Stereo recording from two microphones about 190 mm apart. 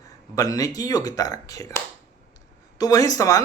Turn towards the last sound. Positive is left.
turn(degrees=20)  # may be behind; listen again after turning